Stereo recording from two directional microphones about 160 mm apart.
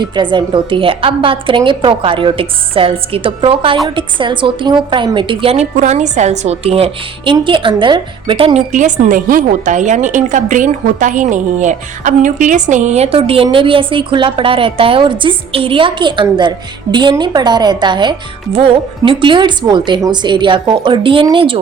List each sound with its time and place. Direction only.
0.0 s a woman's voice: 30° right (ahead or behind)
8.7 s a woman's voice: 55° right (ahead or behind); by 21.6 s 30° right (ahead or behind)